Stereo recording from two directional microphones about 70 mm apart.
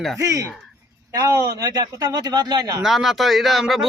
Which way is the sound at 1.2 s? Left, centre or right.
Right.